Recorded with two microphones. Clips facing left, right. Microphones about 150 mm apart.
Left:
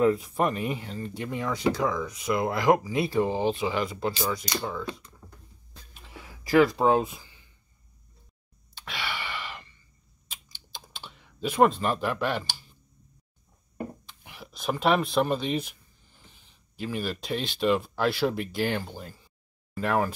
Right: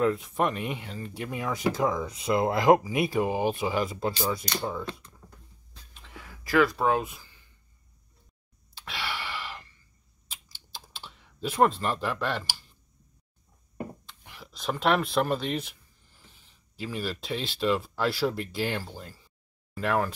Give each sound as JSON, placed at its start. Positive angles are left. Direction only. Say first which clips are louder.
{"t": 0.0, "sound": "speech", "louder": "left 2 dB", "side_deg": 5}
{"t": 1.7, "sound": "speech", "louder": "even", "side_deg": -20}
{"t": 5.9, "sound": "a sound", "louder": "left 1 dB", "side_deg": 10}
{"t": 6.5, "sound": "speech", "louder": "left 3 dB", "side_deg": 15}
{"t": 8.8, "sound": "gasp", "louder": "even", "side_deg": 0}
{"t": 10.3, "sound": "typing", "louder": "left 1 dB", "side_deg": -5}
{"t": 14.0, "sound": "a sound", "louder": "left 2 dB", "side_deg": 5}
{"t": 16.7, "sound": "speech", "louder": "left 2 dB", "side_deg": 0}